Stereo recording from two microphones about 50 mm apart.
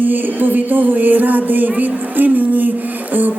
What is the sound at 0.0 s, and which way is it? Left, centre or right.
A man's voice, right.